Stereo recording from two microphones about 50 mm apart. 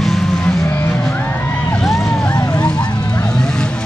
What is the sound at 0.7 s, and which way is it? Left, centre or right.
Music, left.